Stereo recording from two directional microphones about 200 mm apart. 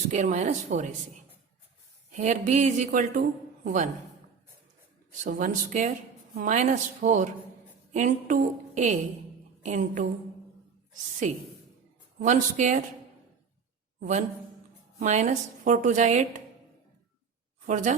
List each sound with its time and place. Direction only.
0.1 s a man's voice: 35° right (ahead or behind)
2.1 s a man's voice: 35° right (ahead or behind)
5.2 s a man's voice: 40° right (ahead or behind)
12.2 s a man's voice: 40° right (ahead or behind)
14.0 s a man's voice: 40° right (ahead or behind)
17.7 s a man's voice: 40° right (ahead or behind)